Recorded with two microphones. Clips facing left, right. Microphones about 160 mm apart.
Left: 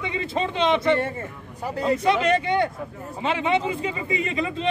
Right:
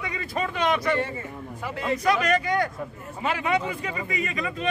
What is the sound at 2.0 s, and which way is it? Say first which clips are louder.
A man's voice: even; 25° left (ahead or behind).